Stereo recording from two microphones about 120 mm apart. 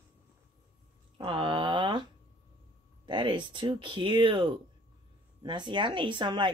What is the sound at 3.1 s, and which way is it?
Speech, 40° right (ahead or behind).